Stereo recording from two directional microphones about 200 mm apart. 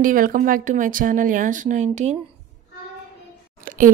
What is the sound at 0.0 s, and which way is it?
Speech, 45° right (ahead or behind).